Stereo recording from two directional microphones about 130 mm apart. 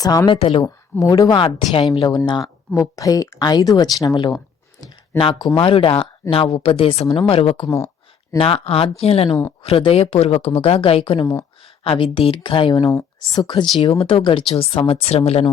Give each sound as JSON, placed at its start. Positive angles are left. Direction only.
{"t": 0.0, "sound": "speech", "side_deg": 30}
{"t": 0.3, "sound": "a woman's voice", "side_deg": 45}
{"t": 0.6, "sound": "speech", "side_deg": 25}
{"t": 1.4, "sound": "a woman's voice", "side_deg": 40}
{"t": 12.9, "sound": "speech", "side_deg": 25}
{"t": 14.0, "sound": "a woman's voice", "side_deg": 45}